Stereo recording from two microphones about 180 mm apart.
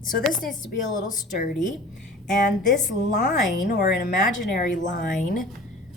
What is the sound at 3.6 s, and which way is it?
Speech, 60° left (ahead or behind).